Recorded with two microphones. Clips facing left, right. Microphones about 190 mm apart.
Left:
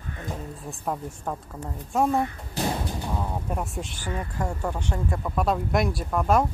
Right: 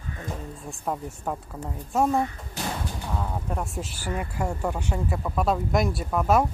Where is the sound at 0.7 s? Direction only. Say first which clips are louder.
Even; centre (ahead or behind).